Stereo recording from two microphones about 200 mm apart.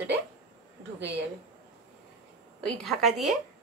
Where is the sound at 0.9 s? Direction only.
60° right (ahead or behind).